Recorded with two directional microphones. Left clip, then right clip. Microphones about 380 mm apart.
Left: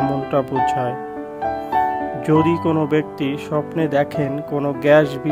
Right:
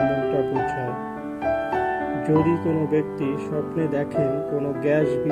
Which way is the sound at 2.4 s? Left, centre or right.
Left.